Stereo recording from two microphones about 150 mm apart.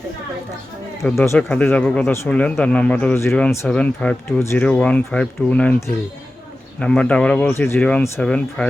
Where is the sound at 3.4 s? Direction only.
5° left (ahead or behind).